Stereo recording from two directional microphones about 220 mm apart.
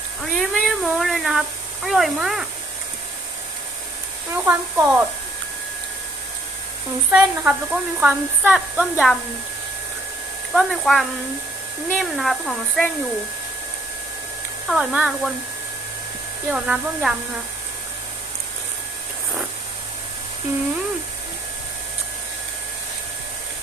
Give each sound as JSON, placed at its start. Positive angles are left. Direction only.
{"t": 0.3, "sound": "cat", "side_deg": 0}
{"t": 4.4, "sound": "speech", "side_deg": -5}
{"t": 7.1, "sound": "a woman's voice", "side_deg": -5}
{"t": 10.5, "sound": "a woman's voice", "side_deg": 0}
{"t": 14.7, "sound": "a woman's voice", "side_deg": 0}
{"t": 16.5, "sound": "a woman's voice", "side_deg": -5}